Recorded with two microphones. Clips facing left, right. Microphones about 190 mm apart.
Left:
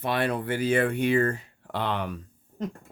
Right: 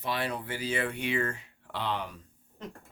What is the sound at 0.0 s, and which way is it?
Speech, 55° left (ahead or behind).